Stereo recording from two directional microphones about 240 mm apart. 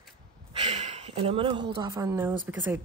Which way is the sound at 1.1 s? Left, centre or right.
Right.